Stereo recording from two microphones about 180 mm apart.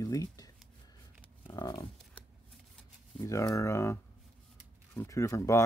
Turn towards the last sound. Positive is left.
turn(degrees=15)  # may be behind; listen again after turning